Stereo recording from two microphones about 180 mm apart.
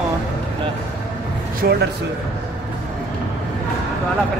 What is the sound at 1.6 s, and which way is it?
Speech, 55° right (ahead or behind).